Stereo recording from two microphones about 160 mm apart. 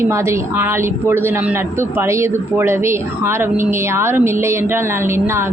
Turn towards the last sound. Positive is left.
turn(degrees=-15)  # may be behind; listen again after turning